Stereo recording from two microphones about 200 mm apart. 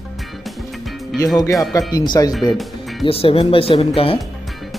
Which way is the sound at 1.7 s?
20° left (ahead or behind).